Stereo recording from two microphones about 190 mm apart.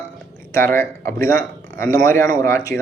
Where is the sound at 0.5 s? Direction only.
15° left (ahead or behind).